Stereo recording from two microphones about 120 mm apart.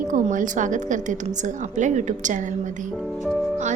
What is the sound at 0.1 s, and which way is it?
A woman's voice, 90° right.